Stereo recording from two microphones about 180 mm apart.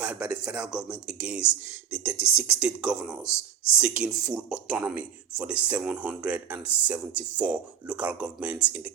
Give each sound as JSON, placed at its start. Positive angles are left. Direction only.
{"t": 0.0, "sound": "speech", "side_deg": -5}